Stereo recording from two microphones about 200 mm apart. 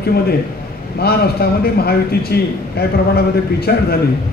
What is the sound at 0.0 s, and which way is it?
A man's voice, 50° left (ahead or behind).